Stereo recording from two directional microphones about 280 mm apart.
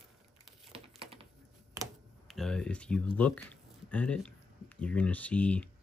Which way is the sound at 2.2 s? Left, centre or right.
Centre.